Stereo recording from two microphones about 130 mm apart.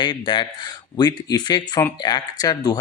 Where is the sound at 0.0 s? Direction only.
35° left (ahead or behind).